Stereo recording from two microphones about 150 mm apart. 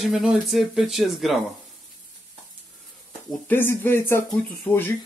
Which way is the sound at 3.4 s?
15° left (ahead or behind).